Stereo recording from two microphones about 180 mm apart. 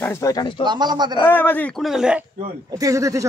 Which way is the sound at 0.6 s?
25° right (ahead or behind).